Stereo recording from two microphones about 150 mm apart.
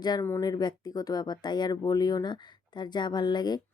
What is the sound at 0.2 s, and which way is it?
Speech, 20° left (ahead or behind).